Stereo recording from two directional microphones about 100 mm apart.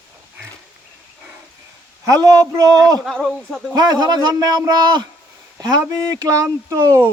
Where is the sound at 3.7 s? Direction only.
45° right (ahead or behind).